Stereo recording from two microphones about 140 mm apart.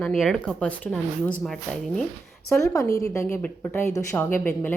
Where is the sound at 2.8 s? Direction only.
25° left (ahead or behind).